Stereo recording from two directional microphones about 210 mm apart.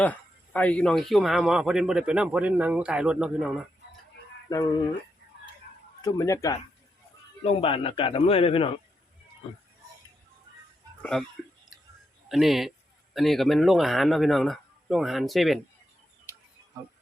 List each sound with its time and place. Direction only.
0.0 s a man's voice: 5° left (ahead or behind)
4.5 s speech: 15° left (ahead or behind)
6.0 s speech: 15° left (ahead or behind)
7.4 s speech: 25° left (ahead or behind)
11.0 s speech: 5° left (ahead or behind)
12.3 s a man's voice: centre (ahead or behind)